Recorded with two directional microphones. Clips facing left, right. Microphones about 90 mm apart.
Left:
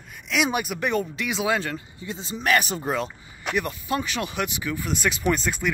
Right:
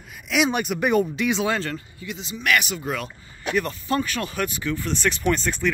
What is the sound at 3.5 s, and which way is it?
Speech, 10° left (ahead or behind).